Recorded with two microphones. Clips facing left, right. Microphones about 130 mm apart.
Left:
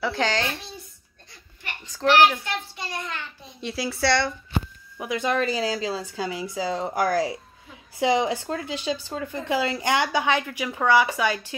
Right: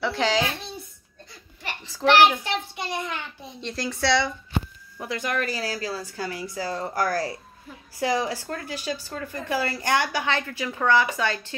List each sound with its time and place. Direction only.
0.0 s a woman's voice: centre (ahead or behind)
1.9 s a child's voice: 10° right (ahead or behind)
2.4 s a child's voice: 20° right (ahead or behind)
3.6 s a woman's voice: 5° left (ahead or behind)
4.9 s a woman's voice: 15° left (ahead or behind)